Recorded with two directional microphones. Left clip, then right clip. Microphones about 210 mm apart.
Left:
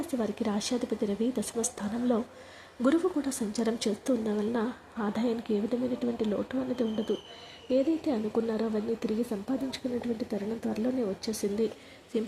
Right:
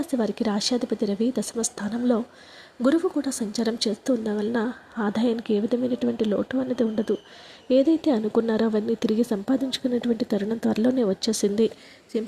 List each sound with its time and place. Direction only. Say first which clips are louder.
0.1 s a woman's voice: right 6 dB; 25° right (ahead or behind)